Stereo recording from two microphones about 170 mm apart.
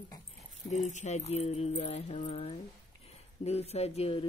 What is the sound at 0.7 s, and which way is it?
Speech, 45° left (ahead or behind).